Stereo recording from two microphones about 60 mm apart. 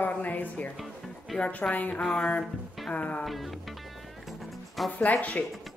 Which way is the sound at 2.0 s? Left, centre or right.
Centre.